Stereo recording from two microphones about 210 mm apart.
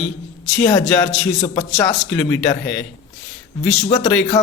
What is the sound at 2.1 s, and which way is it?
Speech, 5° left (ahead or behind).